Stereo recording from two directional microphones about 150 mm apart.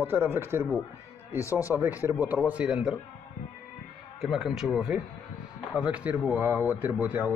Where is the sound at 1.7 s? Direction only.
10° right (ahead or behind).